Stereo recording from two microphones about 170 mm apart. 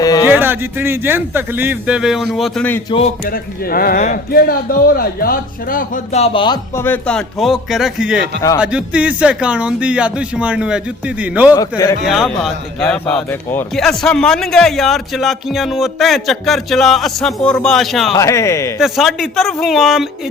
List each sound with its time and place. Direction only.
0.0 s a sound: 20° left (ahead or behind)
0.3 s a man's voice: 10° right (ahead or behind)
2.9 s speech: 30° left (ahead or behind)
3.2 s a man's voice: 60° left (ahead or behind)
6.1 s speech: 35° left (ahead or behind)
6.7 s a man's voice: 10° left (ahead or behind); by 11.5 s 10° right (ahead or behind)
11.5 s speech: 20° left (ahead or behind)
12.0 s speech: centre (ahead or behind)
18.2 s speech: 15° left (ahead or behind)
18.8 s speech: centre (ahead or behind)